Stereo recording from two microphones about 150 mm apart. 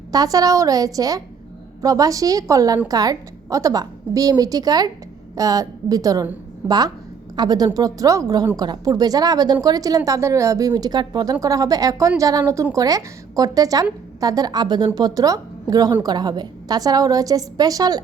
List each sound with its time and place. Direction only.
0.1 s speech: 25° right (ahead or behind)